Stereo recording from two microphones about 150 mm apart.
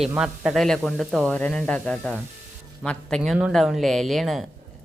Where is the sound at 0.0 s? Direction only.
5° right (ahead or behind).